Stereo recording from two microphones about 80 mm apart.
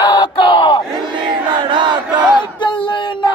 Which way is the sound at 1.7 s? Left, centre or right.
Right.